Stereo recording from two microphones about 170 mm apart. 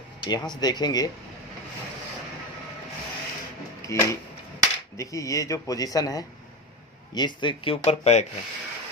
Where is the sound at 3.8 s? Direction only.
20° left (ahead or behind).